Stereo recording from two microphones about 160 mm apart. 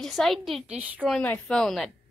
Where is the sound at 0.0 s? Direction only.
Centre (ahead or behind).